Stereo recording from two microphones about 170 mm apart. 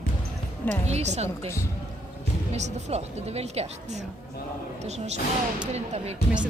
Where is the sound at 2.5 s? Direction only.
40° right (ahead or behind).